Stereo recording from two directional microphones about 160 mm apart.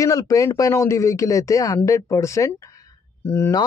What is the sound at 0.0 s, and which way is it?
Speech, 20° left (ahead or behind).